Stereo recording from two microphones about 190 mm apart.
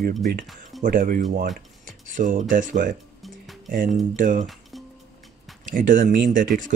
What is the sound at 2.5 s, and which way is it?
Speech, 45° right (ahead or behind).